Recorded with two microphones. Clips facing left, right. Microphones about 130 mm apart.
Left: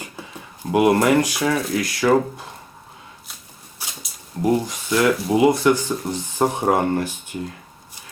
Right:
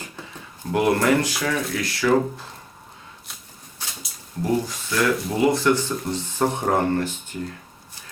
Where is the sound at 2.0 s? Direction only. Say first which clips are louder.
Left 2 dB; 30° left (ahead or behind).